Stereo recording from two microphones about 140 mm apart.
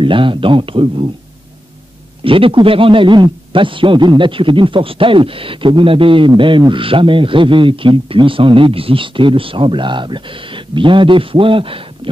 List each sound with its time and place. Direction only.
0.0 s a man's voice: 35° right (ahead or behind)
2.2 s a man's voice: 40° right (ahead or behind)